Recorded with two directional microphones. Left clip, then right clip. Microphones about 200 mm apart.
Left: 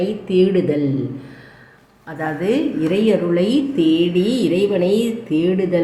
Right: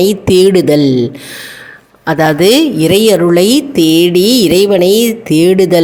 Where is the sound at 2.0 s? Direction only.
55° right (ahead or behind).